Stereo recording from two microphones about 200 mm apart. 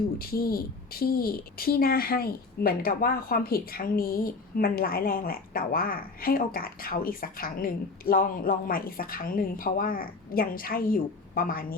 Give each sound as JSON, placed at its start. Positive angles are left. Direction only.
{"t": 0.2, "sound": "a woman's voice", "side_deg": 50}